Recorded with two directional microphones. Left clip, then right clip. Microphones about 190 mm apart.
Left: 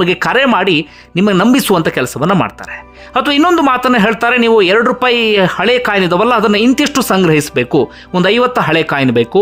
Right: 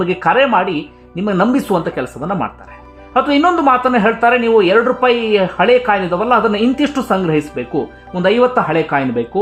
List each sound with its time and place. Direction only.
0.0 s speech: 30° left (ahead or behind)